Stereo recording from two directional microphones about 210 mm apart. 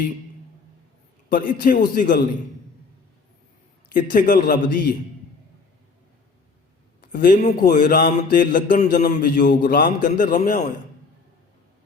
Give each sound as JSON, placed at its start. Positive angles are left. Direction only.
{"t": 1.3, "sound": "a man's voice", "side_deg": 40}
{"t": 3.9, "sound": "a man's voice", "side_deg": 40}
{"t": 7.0, "sound": "a man's voice", "side_deg": 40}